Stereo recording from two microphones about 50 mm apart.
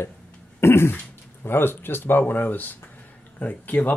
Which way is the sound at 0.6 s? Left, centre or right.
Left.